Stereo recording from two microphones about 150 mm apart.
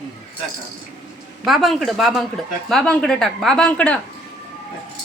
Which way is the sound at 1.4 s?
Centre (ahead or behind).